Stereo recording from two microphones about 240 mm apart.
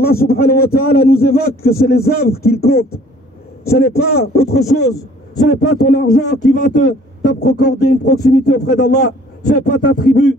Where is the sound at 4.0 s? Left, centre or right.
Left.